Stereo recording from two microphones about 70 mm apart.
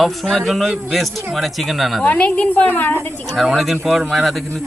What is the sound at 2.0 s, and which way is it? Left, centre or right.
Speech, centre.